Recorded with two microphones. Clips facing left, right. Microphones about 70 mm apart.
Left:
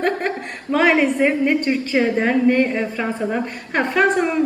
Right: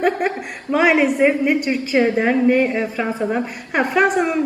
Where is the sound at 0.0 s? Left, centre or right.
Centre.